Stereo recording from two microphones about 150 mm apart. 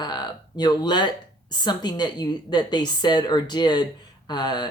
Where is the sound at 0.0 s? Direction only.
30° left (ahead or behind).